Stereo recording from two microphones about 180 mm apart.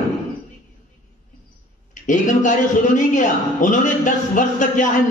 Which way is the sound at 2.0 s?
45° left (ahead or behind).